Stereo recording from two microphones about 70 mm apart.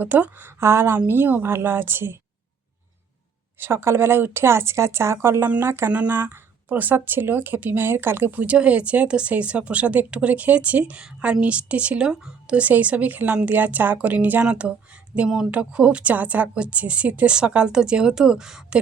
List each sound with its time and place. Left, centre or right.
0.0 s speech: right
3.6 s a woman's voice: right; by 18.8 s centre